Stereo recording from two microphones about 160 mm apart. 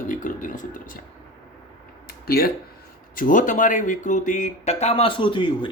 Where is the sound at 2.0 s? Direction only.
75° left (ahead or behind).